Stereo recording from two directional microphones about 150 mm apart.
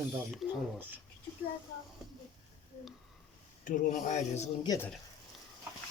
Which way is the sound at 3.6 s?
55° left (ahead or behind).